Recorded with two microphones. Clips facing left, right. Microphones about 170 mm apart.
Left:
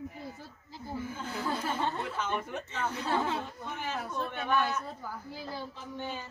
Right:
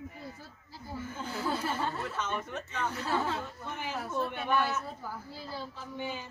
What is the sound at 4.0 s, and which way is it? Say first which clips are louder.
A woman's voice: right 5 dB; 5° right (ahead or behind).